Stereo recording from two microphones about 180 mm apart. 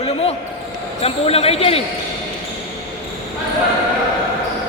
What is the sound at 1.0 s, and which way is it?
Speech, 35° left (ahead or behind).